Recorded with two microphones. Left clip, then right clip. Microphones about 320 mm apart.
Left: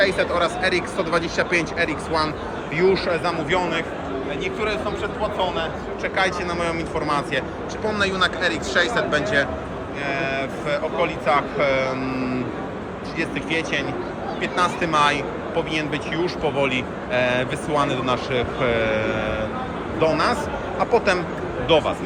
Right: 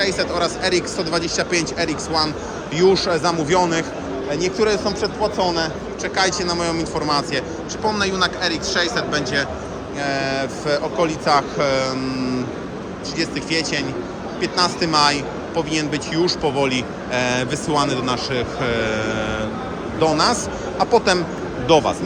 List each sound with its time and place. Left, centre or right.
0.0 s speech: centre
5.2 s speech: right
6.1 s speech: centre